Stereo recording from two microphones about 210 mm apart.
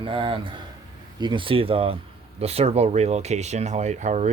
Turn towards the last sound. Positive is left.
turn(degrees=-35)  # may be behind; listen again after turning